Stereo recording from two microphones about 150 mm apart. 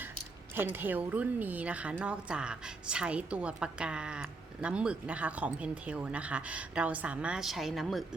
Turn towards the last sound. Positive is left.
turn(degrees=0)  # may be behind; listen again after turning